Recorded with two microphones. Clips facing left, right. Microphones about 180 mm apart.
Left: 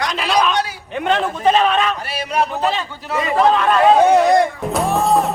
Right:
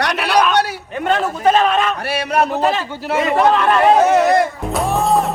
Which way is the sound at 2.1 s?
65° right (ahead or behind).